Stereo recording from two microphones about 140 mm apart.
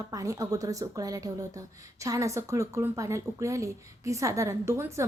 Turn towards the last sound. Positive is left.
turn(degrees=-20)  # may be behind; listen again after turning